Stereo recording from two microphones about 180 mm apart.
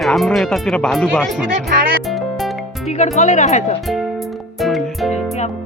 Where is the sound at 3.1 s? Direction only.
40° left (ahead or behind).